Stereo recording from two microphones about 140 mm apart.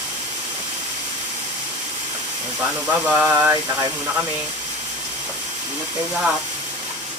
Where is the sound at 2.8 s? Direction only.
10° right (ahead or behind).